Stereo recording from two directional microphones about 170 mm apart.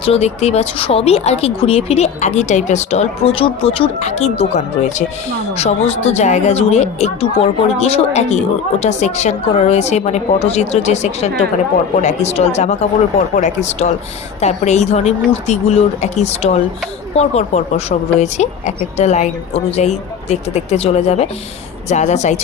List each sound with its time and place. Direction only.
0.0 s a woman's voice: 35° left (ahead or behind)